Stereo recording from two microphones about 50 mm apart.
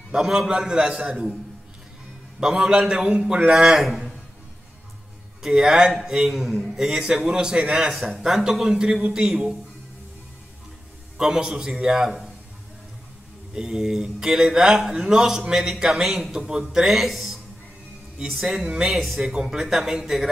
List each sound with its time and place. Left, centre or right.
0.1 s a man's voice: centre
2.4 s a man's voice: centre
5.4 s a man's voice: centre
11.1 s a man's voice: centre
13.6 s a man's voice: centre